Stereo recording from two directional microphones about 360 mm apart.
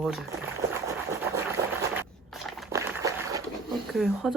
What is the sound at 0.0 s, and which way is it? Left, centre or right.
Boiling, centre.